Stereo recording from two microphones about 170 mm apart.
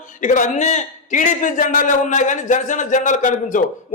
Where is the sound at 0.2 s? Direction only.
45° left (ahead or behind).